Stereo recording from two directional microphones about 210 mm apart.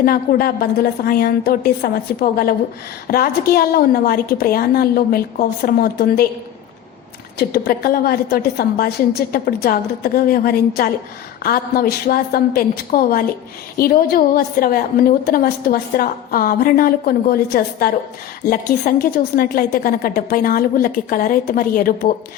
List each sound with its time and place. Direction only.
0.0 s a woman's voice: 45° left (ahead or behind)
7.3 s a woman's voice: 45° left (ahead or behind)